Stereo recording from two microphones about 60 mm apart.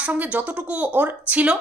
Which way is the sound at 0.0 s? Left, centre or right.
Right.